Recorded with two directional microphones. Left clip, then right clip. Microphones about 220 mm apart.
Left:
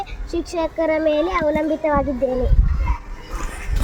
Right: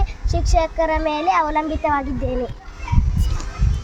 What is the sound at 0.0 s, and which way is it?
A child's voice, 20° right (ahead or behind).